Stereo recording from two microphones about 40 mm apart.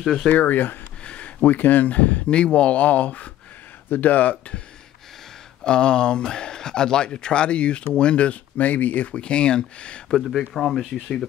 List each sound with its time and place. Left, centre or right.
0.3 s speech: left
1.0 s speech: left
2.2 s speech: left
5.6 s speech: left
8.5 s speech: left
9.1 s speech: left
10.1 s speech: centre